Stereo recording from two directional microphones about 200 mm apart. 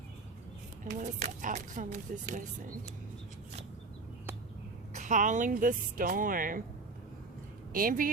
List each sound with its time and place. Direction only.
0.9 s speech: 35° right (ahead or behind)
4.9 s speech: 40° right (ahead or behind)
7.7 s speech: 45° right (ahead or behind)